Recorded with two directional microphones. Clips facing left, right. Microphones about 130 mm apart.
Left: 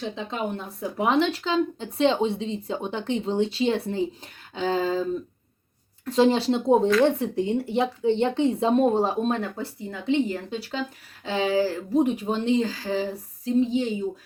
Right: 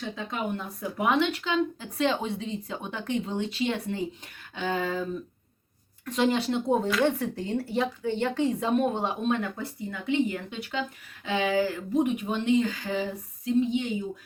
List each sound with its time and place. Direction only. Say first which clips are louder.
0.2 s speech: left 2 dB; 25° left (ahead or behind)
6.1 s a woman's voice: left 5 dB; 30° left (ahead or behind)